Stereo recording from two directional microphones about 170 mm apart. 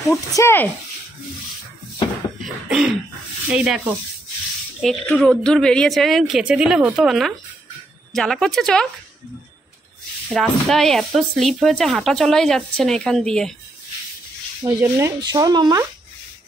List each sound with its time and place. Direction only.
0.1 s speech: 15° left (ahead or behind)
2.4 s throat clearing: 5° right (ahead or behind)
3.5 s speech: 5° right (ahead or behind)
10.3 s speech: centre (ahead or behind)
14.6 s speech: 15° right (ahead or behind)